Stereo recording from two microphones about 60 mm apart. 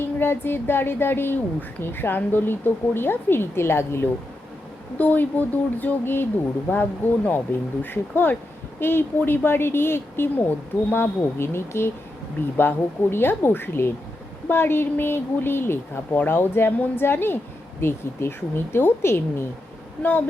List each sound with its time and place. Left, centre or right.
0.0 s a woman's voice: left
4.9 s speech: left
7.3 s a woman's voice: left
20.0 s a woman's voice: left